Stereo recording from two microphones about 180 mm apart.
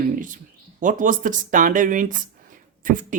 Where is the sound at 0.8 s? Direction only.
45° right (ahead or behind).